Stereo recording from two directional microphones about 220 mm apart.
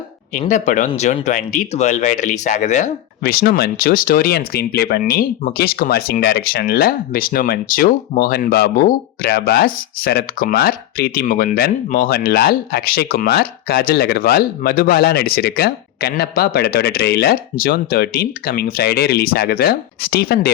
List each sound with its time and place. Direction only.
0.3 s speech: 35° left (ahead or behind)